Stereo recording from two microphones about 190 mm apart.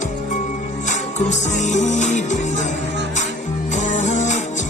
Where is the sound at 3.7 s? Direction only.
40° left (ahead or behind).